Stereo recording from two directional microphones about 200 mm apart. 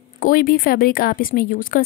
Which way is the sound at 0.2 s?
45° left (ahead or behind).